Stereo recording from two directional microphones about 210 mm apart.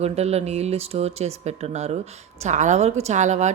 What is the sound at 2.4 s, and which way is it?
A woman's voice, 35° right (ahead or behind).